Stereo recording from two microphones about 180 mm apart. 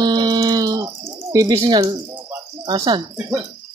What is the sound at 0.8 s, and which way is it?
Bird, 15° right (ahead or behind).